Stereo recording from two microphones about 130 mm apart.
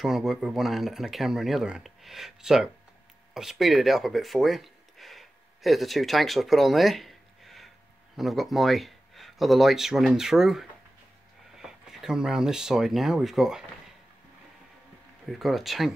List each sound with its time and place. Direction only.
0.0 s speech: centre (ahead or behind)
15.2 s speech: centre (ahead or behind)